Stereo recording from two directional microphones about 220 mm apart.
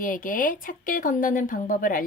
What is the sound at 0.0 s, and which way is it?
A woman's voice, 40° left (ahead or behind).